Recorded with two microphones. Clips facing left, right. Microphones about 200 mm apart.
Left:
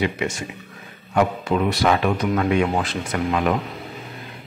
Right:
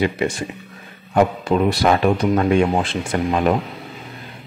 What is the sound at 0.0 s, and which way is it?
Speech, 35° right (ahead or behind).